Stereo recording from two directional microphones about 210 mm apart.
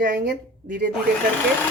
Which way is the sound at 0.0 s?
45° right (ahead or behind).